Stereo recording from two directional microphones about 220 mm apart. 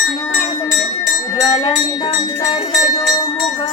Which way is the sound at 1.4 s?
15° left (ahead or behind).